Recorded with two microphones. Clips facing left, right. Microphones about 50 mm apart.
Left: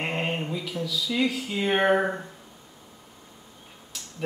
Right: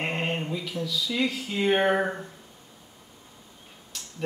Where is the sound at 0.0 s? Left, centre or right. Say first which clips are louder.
Even; centre.